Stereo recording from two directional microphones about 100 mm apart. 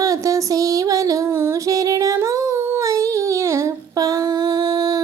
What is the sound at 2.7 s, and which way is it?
Humming, 30° right (ahead or behind).